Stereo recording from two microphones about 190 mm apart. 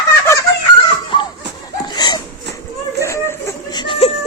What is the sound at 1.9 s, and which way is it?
Hiccup, 20° left (ahead or behind).